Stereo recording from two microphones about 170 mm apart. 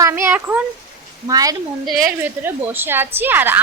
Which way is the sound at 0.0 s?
15° right (ahead or behind).